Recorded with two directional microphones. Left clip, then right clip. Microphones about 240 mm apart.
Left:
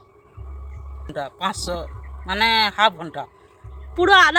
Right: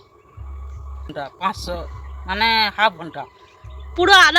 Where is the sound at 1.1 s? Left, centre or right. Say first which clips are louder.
Right 1 dB; left.